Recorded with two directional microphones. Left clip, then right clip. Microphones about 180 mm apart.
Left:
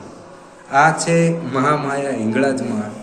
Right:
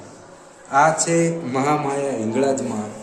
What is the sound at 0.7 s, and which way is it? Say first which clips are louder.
A man's voice: left 2 dB; 15° right (ahead or behind).